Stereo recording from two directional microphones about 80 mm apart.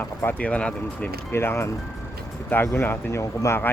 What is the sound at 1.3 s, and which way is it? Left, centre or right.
Speech, left.